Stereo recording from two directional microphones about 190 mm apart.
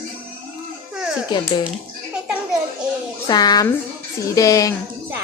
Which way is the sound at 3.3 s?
20° left (ahead or behind).